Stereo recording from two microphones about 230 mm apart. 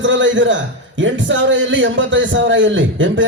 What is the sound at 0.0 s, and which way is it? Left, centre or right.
A man's voice, right.